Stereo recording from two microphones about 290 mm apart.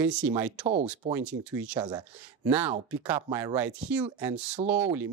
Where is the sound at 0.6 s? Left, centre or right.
Right.